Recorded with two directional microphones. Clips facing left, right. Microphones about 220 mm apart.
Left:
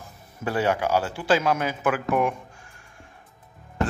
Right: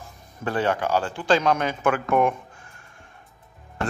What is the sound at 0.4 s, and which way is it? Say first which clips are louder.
A man's voice: even; 10° left (ahead or behind).